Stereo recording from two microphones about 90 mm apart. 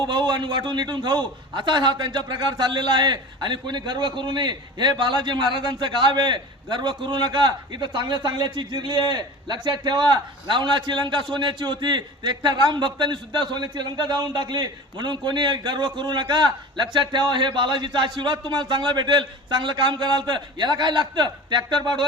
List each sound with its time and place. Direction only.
0.0 s a man's voice: 55° right (ahead or behind)